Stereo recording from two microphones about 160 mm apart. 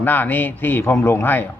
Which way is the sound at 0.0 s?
10° left (ahead or behind).